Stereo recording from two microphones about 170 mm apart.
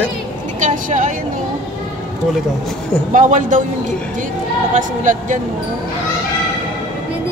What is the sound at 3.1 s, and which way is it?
Speech, 50° right (ahead or behind).